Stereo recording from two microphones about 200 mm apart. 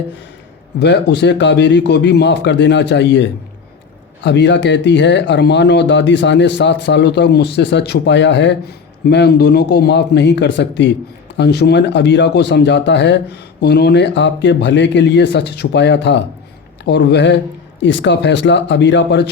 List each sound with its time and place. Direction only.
0.8 s speech: 55° left (ahead or behind)